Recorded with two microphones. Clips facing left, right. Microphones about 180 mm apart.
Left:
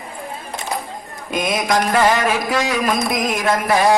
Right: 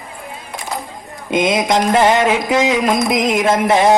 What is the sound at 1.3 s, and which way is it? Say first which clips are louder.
Music: right 4 dB; 20° right (ahead or behind).